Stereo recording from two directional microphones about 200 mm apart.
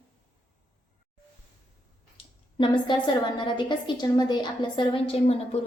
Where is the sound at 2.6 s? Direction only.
25° left (ahead or behind).